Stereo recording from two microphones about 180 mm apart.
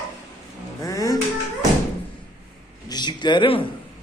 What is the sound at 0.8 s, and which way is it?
Dishes, 20° left (ahead or behind).